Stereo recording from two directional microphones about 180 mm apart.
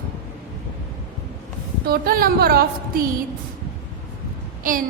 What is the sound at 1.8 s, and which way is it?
Speech, 55° right (ahead or behind).